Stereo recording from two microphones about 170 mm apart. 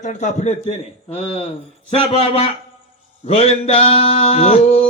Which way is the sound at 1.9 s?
35° left (ahead or behind).